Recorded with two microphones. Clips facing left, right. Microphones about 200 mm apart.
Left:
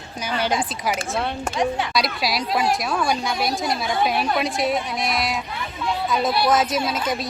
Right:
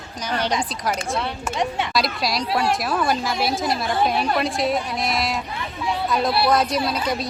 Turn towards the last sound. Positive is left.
turn(degrees=0)  # may be behind; listen again after turning